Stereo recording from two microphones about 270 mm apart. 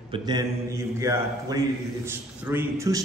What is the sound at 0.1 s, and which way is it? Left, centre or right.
A man's voice, centre.